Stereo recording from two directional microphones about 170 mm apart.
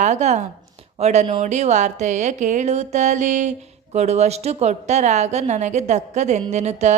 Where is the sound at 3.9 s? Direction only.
40° right (ahead or behind).